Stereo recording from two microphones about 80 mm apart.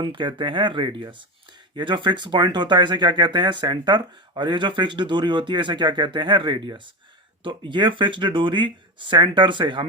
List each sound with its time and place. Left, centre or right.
0.0 s speech: right
7.4 s speech: right